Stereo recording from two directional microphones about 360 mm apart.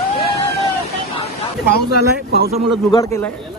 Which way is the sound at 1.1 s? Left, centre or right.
Left.